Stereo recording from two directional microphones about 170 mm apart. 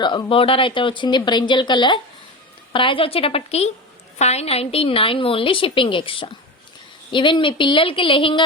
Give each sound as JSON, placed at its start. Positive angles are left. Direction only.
{"t": 0.0, "sound": "a woman's voice", "side_deg": 30}